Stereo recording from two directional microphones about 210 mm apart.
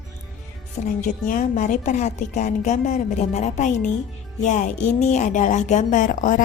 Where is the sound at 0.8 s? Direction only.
35° left (ahead or behind).